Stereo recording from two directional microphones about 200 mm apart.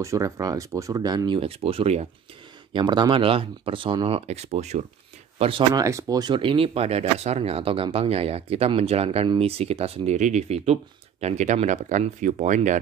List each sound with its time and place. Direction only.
0.0 s speech: 15° right (ahead or behind); by 5.5 s 30° right (ahead or behind)
5.8 s speech: 15° right (ahead or behind); by 12.7 s 40° right (ahead or behind)